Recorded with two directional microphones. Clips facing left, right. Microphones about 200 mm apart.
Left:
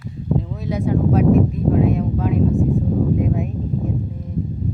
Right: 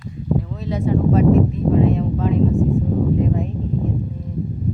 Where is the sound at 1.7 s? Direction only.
5° left (ahead or behind).